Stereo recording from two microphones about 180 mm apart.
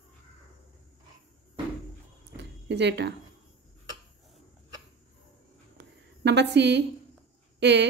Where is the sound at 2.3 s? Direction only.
75° right (ahead or behind).